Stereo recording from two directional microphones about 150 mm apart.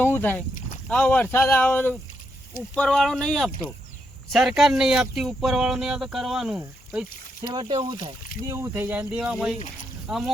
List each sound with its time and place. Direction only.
0.0 s speech: 15° left (ahead or behind); by 6.6 s 5° right (ahead or behind)
7.5 s speech: 35° right (ahead or behind)
8.4 s speech: 20° right (ahead or behind); by 10.3 s 5° right (ahead or behind)